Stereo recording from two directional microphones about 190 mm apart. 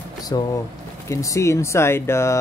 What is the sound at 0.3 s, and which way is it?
Speech, 20° left (ahead or behind).